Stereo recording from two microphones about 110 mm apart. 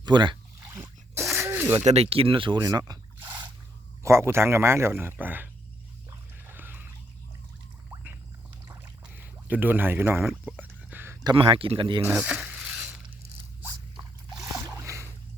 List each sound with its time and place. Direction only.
0.0 s speech: 45° right (ahead or behind)
0.7 s a sound: 20° right (ahead or behind)
1.4 s zipper: 20° right (ahead or behind)
1.7 s speech: 80° right; by 2.6 s 50° right (ahead or behind)
2.6 s speech: 35° right (ahead or behind)
4.0 s speech: 25° right (ahead or behind)
6.1 s boat: 20° right (ahead or behind)
8.6 s a sound: 20° right (ahead or behind)
11.3 s speech: 55° right (ahead or behind)
12.0 s speech: 15° right (ahead or behind)
12.5 s crushing: 5° right (ahead or behind)